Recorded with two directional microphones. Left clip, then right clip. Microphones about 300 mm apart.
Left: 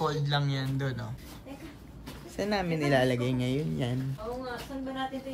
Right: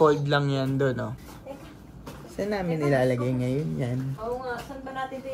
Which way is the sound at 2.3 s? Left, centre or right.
Centre.